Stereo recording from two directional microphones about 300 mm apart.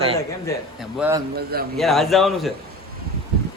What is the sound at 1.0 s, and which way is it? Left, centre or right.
Speech, centre.